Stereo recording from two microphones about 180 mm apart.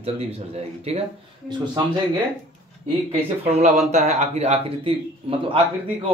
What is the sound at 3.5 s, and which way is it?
Speech, 40° right (ahead or behind).